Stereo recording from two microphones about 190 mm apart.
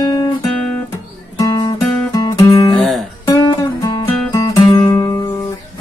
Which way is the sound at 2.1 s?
20° left (ahead or behind).